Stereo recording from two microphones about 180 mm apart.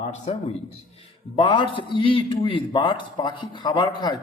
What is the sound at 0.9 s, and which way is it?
A man's voice, 30° left (ahead or behind).